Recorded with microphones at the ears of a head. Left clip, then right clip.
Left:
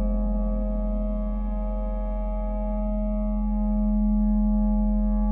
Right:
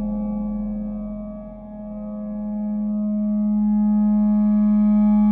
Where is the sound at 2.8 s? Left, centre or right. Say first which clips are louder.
Right 5 dB; right.